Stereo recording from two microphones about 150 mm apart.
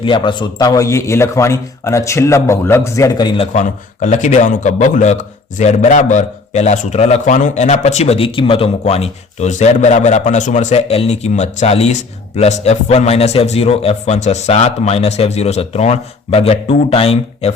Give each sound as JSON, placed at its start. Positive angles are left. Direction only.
{"t": 0.0, "sound": "a man's voice", "side_deg": 35}
{"t": 3.5, "sound": "speech", "side_deg": 55}